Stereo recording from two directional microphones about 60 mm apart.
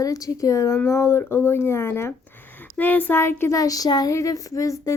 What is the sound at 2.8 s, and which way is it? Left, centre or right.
Speech, left.